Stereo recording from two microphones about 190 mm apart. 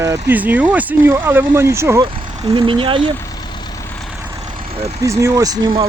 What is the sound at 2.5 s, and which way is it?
Speech, 25° right (ahead or behind).